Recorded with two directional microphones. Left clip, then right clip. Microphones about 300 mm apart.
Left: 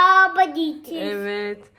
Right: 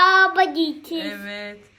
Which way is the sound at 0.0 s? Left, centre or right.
Right.